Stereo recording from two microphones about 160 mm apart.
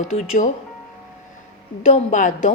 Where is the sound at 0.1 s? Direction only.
45° left (ahead or behind).